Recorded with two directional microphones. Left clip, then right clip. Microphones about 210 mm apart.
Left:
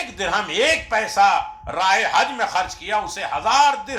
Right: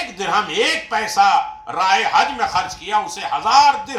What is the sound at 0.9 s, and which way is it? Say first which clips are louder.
Speech: right 4 dB; 30° left (ahead or behind).